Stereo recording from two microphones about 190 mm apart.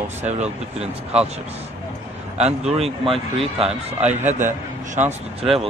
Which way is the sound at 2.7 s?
30° right (ahead or behind).